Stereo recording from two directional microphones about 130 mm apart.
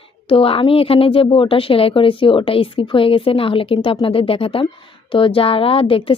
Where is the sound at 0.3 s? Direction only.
45° left (ahead or behind).